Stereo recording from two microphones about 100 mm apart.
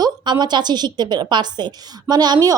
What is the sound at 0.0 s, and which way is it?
A woman's voice, 45° right (ahead or behind).